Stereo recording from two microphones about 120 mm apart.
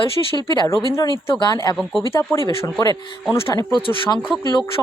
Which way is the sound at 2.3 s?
20° left (ahead or behind).